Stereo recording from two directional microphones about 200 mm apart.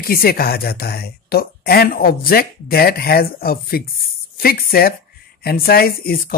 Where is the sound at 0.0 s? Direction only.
50° left (ahead or behind).